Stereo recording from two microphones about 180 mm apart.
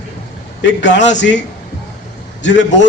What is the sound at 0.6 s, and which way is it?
Speech, 80° left.